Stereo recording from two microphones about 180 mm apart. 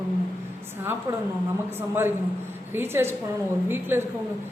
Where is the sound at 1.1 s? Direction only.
15° right (ahead or behind).